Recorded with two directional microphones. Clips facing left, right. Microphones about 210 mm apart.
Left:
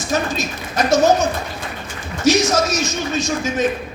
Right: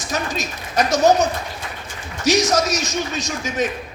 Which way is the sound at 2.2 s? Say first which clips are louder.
Left 2 dB; 35° right (ahead or behind).